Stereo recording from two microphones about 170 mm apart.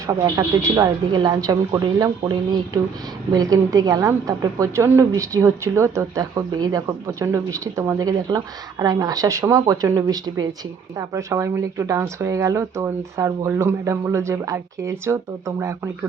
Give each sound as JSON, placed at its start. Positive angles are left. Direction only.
{"t": 0.3, "sound": "a woman's voice", "side_deg": -20}